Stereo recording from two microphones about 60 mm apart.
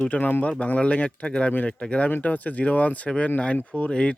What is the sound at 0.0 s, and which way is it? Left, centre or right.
Speech, left.